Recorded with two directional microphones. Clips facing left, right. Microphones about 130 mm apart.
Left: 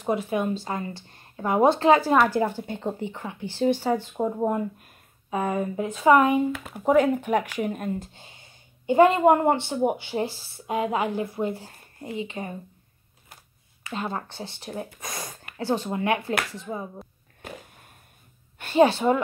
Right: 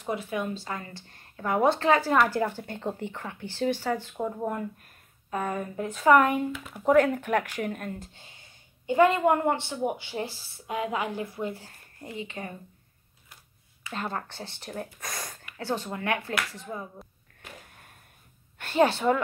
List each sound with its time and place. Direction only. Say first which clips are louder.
0.0 s a woman's voice: left 5 dB; 30° left (ahead or behind)
13.9 s speech: left 3 dB; 15° left (ahead or behind)
15.5 s a woman's voice: left 5 dB; 20° left (ahead or behind)
18.6 s a woman's voice: left 4 dB; 10° left (ahead or behind)